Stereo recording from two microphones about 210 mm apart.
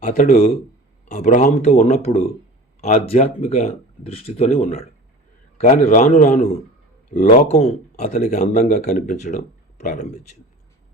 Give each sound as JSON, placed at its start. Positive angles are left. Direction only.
{"t": 0.0, "sound": "speech", "side_deg": 35}